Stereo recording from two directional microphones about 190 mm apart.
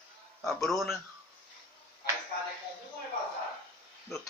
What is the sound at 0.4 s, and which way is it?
Speech, centre (ahead or behind).